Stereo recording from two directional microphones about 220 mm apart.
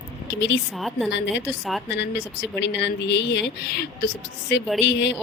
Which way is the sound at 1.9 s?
55° left (ahead or behind).